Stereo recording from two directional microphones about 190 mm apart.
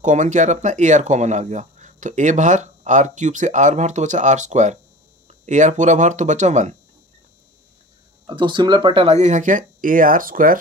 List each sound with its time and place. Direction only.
0.0 s speech: 40° right (ahead or behind)
8.3 s speech: 25° right (ahead or behind); by 10.6 s 45° right (ahead or behind)